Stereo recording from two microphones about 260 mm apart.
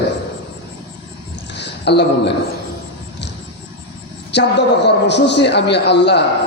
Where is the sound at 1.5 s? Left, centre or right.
Left.